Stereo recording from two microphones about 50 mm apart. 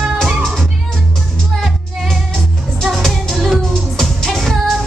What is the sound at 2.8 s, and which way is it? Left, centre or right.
Music, centre.